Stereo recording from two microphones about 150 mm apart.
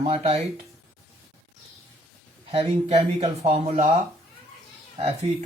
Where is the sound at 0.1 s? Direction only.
40° right (ahead or behind).